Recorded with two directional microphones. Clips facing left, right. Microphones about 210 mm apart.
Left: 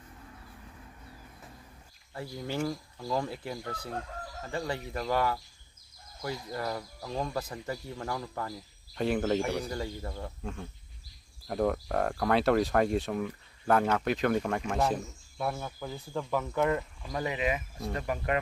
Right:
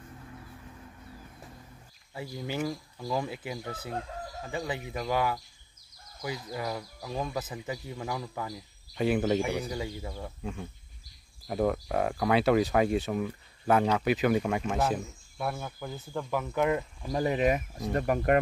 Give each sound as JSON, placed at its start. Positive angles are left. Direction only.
{"t": 2.1, "sound": "speech", "side_deg": -5}
{"t": 17.1, "sound": "speech", "side_deg": -40}